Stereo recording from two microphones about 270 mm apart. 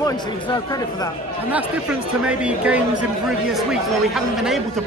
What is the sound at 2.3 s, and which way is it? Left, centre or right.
Speech, centre.